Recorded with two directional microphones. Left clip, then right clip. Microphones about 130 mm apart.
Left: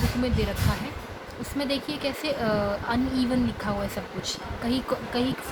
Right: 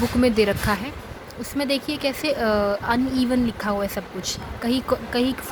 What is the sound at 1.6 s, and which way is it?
Speech, 65° right (ahead or behind).